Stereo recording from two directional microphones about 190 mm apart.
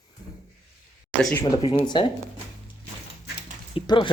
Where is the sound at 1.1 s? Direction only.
5° left (ahead or behind).